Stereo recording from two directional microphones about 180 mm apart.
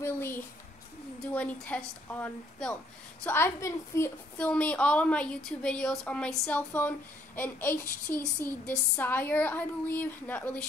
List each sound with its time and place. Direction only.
0.0 s a woman's voice: 10° left (ahead or behind)